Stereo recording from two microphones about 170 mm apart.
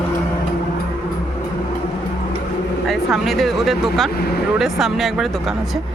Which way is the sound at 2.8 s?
Centre (ahead or behind).